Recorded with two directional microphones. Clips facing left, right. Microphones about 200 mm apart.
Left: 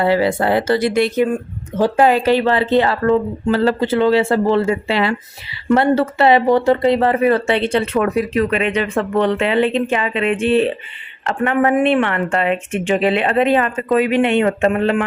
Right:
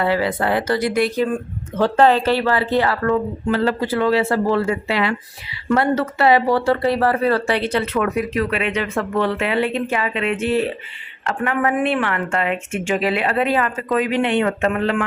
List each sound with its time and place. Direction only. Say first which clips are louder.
0.0 s speech: left 4 dB; 30° left (ahead or behind)